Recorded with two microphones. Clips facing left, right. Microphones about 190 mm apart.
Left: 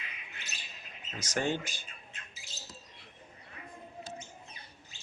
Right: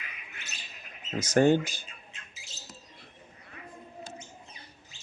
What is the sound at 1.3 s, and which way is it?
Speech, 50° right (ahead or behind).